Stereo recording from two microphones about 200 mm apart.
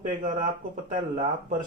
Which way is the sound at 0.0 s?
40° right (ahead or behind).